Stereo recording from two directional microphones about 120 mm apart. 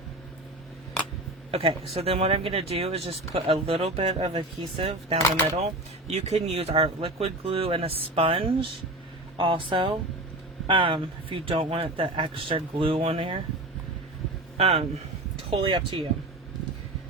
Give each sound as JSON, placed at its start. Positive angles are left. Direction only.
{"t": 1.5, "sound": "speech", "side_deg": -50}
{"t": 14.6, "sound": "speech", "side_deg": -55}
{"t": 15.4, "sound": "speech", "side_deg": -45}